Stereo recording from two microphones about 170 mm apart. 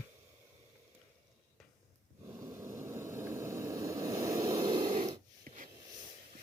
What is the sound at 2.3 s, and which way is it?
Vehicle, 15° right (ahead or behind).